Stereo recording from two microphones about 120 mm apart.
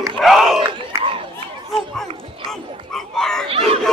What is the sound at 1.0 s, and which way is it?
Chatter, 50° right (ahead or behind).